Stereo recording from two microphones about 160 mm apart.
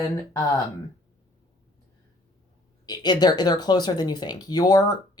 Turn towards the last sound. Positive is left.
turn(degrees=25)  # may be behind; listen again after turning